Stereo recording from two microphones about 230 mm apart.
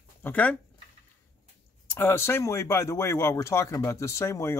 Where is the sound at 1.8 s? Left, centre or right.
Centre.